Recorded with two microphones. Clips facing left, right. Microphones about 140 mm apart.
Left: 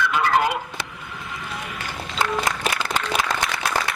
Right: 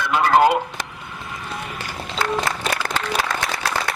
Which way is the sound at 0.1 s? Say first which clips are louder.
Right 10 dB; 35° right (ahead or behind).